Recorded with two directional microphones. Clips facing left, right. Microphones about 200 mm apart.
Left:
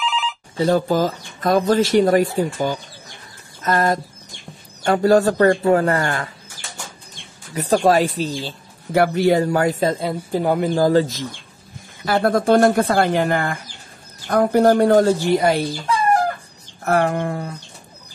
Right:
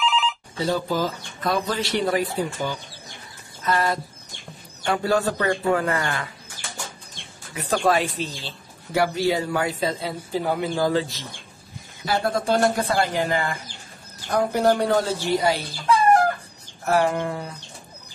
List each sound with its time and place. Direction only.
0.0 s telephone bell ringing: centre (ahead or behind)
0.7 s speech: 50° left (ahead or behind)
7.5 s speech: 40° left (ahead or behind)
12.0 s speech: 55° left (ahead or behind)
16.8 s speech: 55° left (ahead or behind)